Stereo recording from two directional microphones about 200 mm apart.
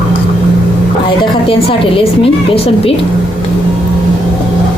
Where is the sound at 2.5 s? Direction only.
30° left (ahead or behind).